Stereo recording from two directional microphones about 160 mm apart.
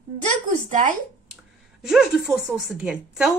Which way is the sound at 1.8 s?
5° right (ahead or behind).